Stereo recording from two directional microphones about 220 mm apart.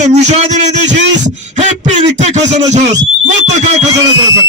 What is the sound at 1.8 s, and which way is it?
A man's voice, 30° right (ahead or behind).